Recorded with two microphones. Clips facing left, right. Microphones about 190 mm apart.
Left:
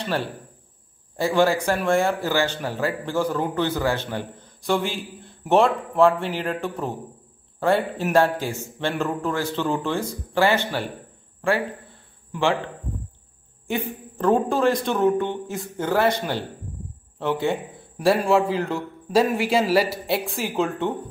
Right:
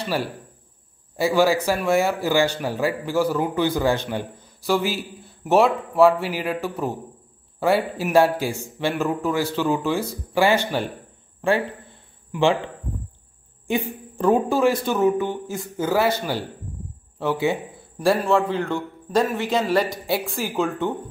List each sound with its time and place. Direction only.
0.0 s a man's voice: 10° right (ahead or behind)
12.3 s a man's voice: 15° right (ahead or behind)
13.7 s speech: 15° right (ahead or behind)
17.9 s a man's voice: 5° left (ahead or behind)